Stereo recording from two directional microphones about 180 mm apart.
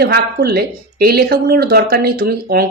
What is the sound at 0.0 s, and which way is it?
Speech, 60° right (ahead or behind).